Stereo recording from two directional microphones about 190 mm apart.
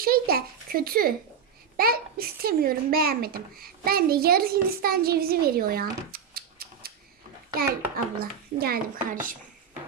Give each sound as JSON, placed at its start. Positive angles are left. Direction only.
{"t": 0.0, "sound": "a child's voice", "side_deg": -50}